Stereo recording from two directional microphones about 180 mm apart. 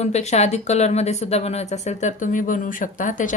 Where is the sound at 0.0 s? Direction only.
40° left (ahead or behind).